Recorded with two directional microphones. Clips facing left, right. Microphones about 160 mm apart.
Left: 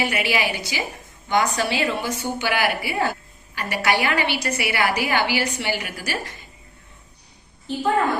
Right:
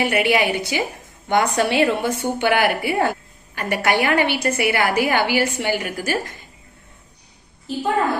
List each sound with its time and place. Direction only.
0.0 s a woman's voice: 55° right (ahead or behind)